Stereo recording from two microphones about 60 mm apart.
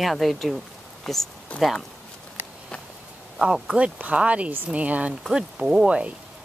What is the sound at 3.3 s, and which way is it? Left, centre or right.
Speech, centre.